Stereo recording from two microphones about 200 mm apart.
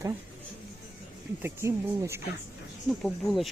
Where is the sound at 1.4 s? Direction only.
15° right (ahead or behind).